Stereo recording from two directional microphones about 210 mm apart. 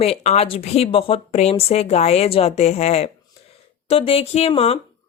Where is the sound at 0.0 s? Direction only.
30° left (ahead or behind).